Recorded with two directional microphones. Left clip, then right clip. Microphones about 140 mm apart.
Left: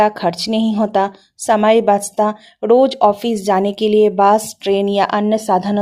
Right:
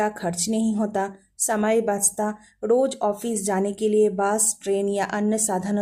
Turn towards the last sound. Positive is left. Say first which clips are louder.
# left 10 dB
turn(degrees=20)  # may be behind; listen again after turning